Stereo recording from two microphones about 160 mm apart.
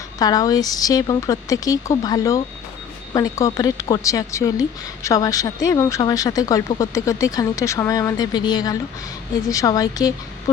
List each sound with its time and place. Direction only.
0.2 s speech: 25° left (ahead or behind)